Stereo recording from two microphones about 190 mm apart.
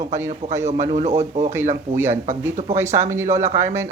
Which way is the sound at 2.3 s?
15° right (ahead or behind).